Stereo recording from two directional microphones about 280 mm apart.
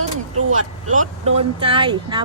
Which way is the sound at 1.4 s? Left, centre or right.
Centre.